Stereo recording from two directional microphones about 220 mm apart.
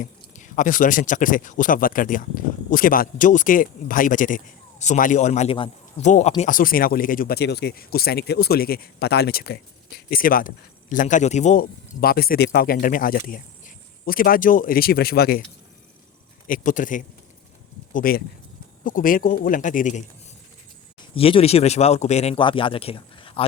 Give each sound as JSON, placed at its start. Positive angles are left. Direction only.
{"t": 0.0, "sound": "speech", "side_deg": 35}
{"t": 16.5, "sound": "speech", "side_deg": 35}
{"t": 21.0, "sound": "speech", "side_deg": 25}